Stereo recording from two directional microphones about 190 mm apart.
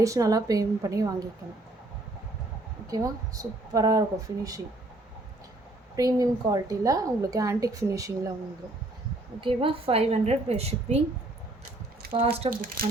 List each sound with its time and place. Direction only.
0.0 s a woman's voice: 15° right (ahead or behind)
2.8 s a woman's voice: 20° right (ahead or behind)
6.0 s a woman's voice: 20° right (ahead or behind)
9.4 s a woman's voice: 25° right (ahead or behind)
12.1 s a woman's voice: 30° right (ahead or behind)
12.5 s speech: 50° right (ahead or behind)